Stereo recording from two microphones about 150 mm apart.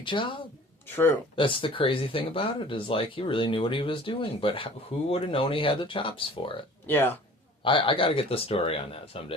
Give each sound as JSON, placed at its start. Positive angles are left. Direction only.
{"t": 0.0, "sound": "speech", "side_deg": 35}
{"t": 6.8, "sound": "speech", "side_deg": 15}
{"t": 7.6, "sound": "speech", "side_deg": 35}